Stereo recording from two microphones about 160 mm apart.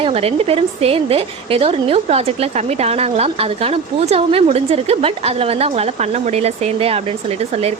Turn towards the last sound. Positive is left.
turn(degrees=-40)  # may be behind; listen again after turning